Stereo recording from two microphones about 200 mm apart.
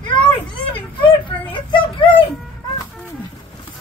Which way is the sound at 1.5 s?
25° left (ahead or behind).